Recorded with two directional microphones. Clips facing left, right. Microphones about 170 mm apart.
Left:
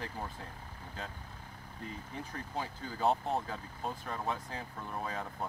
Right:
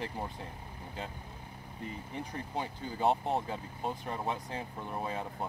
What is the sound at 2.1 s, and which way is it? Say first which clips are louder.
Speech: right 2 dB; 15° right (ahead or behind).